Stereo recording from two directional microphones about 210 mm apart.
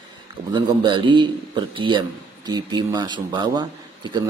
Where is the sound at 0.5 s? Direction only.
20° right (ahead or behind).